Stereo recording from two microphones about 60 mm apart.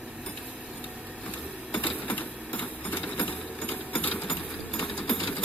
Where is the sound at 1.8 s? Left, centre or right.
Left.